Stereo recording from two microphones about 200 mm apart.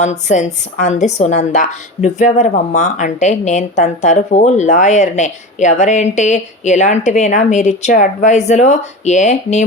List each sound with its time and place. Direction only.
0.0 s a woman's voice: 35° left (ahead or behind)